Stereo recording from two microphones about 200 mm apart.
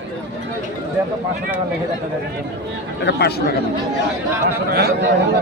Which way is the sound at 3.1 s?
55° left (ahead or behind).